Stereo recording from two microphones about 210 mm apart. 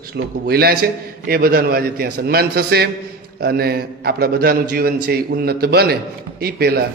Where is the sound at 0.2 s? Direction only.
50° right (ahead or behind).